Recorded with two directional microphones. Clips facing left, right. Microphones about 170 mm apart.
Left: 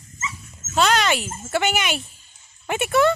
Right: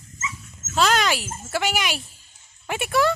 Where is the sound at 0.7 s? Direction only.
Centre (ahead or behind).